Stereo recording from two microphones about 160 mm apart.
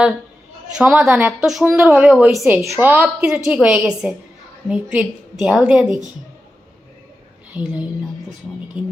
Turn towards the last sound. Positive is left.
turn(degrees=-10)  # may be behind; listen again after turning